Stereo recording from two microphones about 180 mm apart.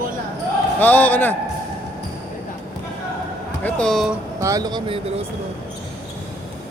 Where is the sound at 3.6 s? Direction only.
5° left (ahead or behind).